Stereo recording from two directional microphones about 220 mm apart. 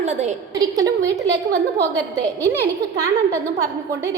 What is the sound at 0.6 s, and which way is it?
Speech, 15° right (ahead or behind).